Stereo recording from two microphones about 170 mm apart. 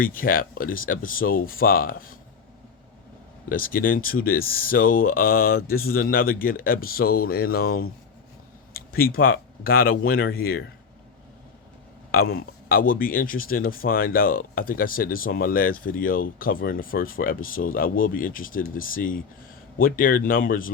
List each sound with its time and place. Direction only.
0.0 s speech: 55° left (ahead or behind)
3.5 s speech: 55° left (ahead or behind)
12.1 s speech: 60° left (ahead or behind)